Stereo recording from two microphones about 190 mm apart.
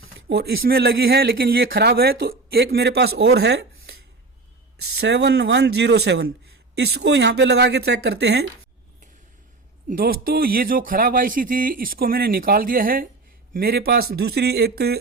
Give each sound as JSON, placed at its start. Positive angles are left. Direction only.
{"t": 0.0, "sound": "speech", "side_deg": -60}
{"t": 4.9, "sound": "speech", "side_deg": -60}
{"t": 9.9, "sound": "speech", "side_deg": -50}